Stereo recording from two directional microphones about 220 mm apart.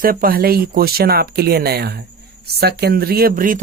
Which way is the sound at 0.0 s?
40° right (ahead or behind).